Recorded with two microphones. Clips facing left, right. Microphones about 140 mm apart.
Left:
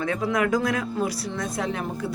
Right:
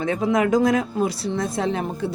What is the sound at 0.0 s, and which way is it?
Speech, 25° right (ahead or behind).